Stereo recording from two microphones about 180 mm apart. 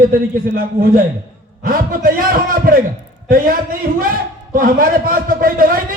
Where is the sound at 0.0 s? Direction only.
55° right (ahead or behind).